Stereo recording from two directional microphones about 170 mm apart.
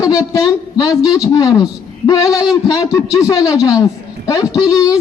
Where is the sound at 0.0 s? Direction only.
20° left (ahead or behind).